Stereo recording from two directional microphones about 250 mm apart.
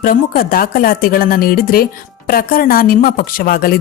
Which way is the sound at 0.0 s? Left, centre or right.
Left.